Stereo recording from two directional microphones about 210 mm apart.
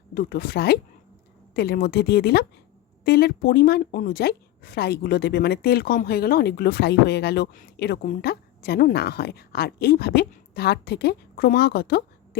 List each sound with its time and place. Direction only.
0.1 s a woman's voice: 45° left (ahead or behind)